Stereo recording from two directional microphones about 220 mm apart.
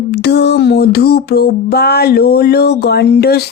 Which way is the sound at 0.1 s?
50° left (ahead or behind).